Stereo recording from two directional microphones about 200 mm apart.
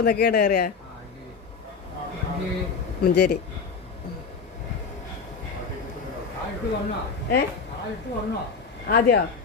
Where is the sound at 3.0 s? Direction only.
55° left (ahead or behind).